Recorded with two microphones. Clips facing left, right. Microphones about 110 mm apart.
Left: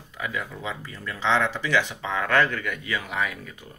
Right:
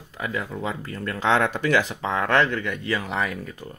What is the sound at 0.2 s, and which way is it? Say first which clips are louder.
Speech: right 3 dB; 40° right (ahead or behind).